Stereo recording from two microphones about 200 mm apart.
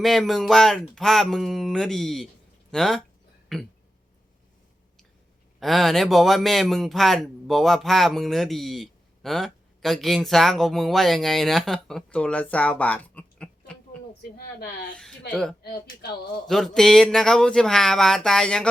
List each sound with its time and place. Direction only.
0.0 s a man's voice: centre (ahead or behind)
5.5 s a man's voice: centre (ahead or behind)
14.2 s a woman's voice: 50° left (ahead or behind)
15.3 s a man's voice: 5° left (ahead or behind)